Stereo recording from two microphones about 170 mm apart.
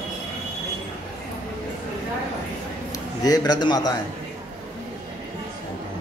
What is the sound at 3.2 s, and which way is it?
Speech, 20° left (ahead or behind).